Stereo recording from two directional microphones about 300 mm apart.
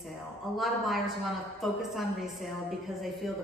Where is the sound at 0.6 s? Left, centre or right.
Centre.